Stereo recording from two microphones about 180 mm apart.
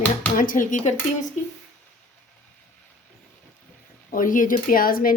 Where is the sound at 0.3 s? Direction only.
50° left (ahead or behind).